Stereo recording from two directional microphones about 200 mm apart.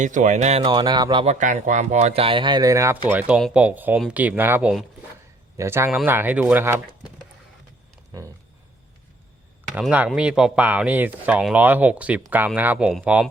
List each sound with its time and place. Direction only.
0.0 s speech: 40° right (ahead or behind)
0.6 s speech: 20° right (ahead or behind)
9.7 s speech: 5° right (ahead or behind)